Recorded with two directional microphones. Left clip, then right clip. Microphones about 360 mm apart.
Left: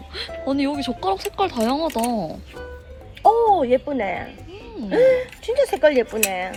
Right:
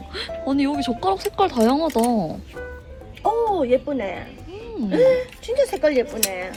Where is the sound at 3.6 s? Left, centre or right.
Left.